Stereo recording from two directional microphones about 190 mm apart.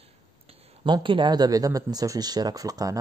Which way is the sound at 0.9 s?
25° right (ahead or behind).